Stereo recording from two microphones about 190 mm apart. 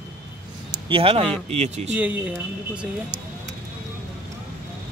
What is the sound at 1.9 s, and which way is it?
Speech, 5° right (ahead or behind).